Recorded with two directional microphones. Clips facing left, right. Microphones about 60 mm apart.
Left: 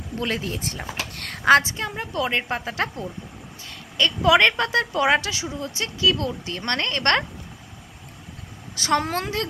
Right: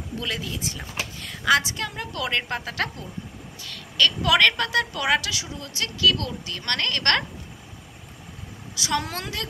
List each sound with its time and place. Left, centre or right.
0.2 s a woman's voice: left
1.1 s a sound: left
1.4 s speech: left
8.7 s a woman's voice: left